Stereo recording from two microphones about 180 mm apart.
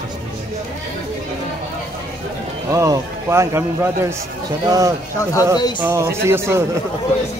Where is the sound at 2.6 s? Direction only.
20° right (ahead or behind).